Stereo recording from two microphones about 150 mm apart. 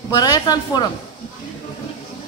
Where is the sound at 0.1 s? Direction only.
25° left (ahead or behind).